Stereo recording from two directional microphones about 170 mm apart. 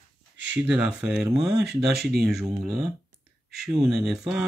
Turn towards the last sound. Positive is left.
turn(degrees=0)  # may be behind; listen again after turning